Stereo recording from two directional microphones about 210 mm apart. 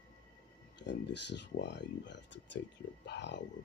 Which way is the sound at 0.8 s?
55° left (ahead or behind).